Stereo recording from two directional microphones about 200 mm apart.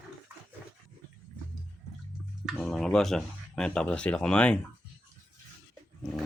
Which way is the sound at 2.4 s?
Centre (ahead or behind).